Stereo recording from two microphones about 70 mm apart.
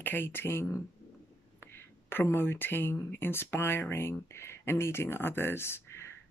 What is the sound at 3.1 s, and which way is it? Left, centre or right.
Speech, left.